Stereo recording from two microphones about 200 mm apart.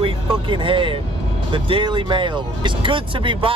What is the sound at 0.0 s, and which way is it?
Speech, 25° right (ahead or behind).